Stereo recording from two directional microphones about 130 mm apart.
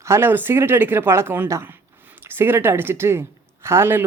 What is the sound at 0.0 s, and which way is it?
A man's voice, 20° right (ahead or behind).